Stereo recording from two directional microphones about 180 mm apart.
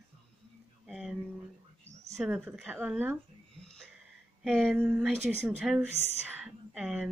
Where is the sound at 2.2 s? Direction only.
5° right (ahead or behind).